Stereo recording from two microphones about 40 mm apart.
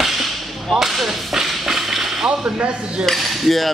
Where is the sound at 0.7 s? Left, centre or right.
Centre.